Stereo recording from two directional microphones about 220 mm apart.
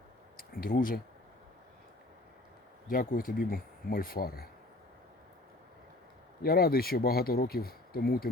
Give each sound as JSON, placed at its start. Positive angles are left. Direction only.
{"t": 0.3, "sound": "speech", "side_deg": 40}
{"t": 2.8, "sound": "speech", "side_deg": 40}
{"t": 6.4, "sound": "speech", "side_deg": 45}